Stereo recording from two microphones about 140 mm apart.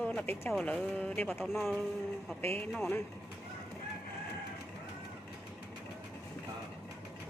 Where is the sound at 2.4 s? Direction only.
15° left (ahead or behind).